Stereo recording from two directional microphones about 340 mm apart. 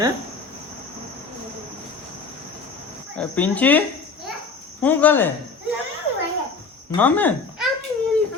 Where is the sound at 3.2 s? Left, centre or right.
Centre.